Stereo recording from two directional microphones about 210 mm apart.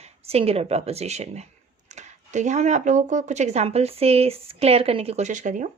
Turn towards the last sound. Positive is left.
turn(degrees=-35)  # may be behind; listen again after turning